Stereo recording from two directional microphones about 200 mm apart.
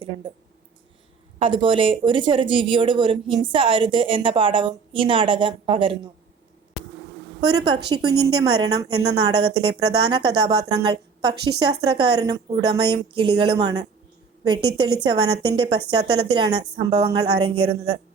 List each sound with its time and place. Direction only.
0.0 s speech: 25° right (ahead or behind)
1.4 s a woman's voice: 25° right (ahead or behind)
7.4 s a woman's voice: 20° right (ahead or behind)
17.5 s speech: 90° right